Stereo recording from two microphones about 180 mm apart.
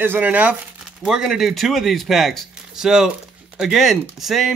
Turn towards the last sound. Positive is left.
turn(degrees=0)  # may be behind; listen again after turning